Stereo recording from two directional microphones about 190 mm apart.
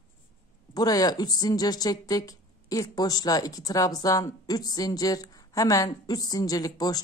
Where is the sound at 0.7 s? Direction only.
20° left (ahead or behind).